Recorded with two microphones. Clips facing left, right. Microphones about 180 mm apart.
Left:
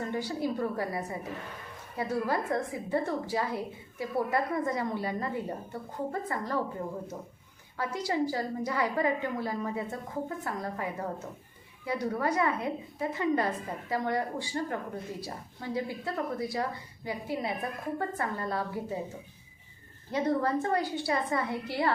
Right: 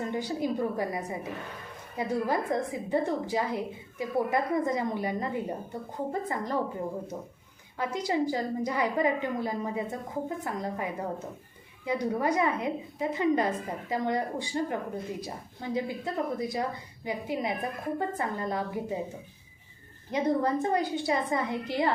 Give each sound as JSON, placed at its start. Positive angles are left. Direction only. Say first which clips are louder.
{"t": 0.0, "sound": "a woman's voice", "louder": "right 1 dB", "side_deg": -20}
{"t": 7.8, "sound": "a woman's voice", "louder": "right 2 dB", "side_deg": -20}
{"t": 20.1, "sound": "a woman's voice", "louder": "right 2 dB", "side_deg": -20}